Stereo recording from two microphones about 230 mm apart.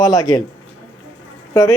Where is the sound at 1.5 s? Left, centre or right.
Centre.